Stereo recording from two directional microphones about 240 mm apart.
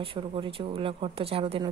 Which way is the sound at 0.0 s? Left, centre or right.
Right.